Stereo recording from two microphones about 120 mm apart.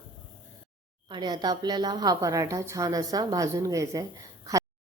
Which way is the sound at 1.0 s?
40° right (ahead or behind).